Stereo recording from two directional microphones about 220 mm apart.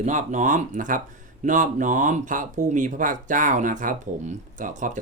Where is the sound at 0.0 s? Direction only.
30° right (ahead or behind).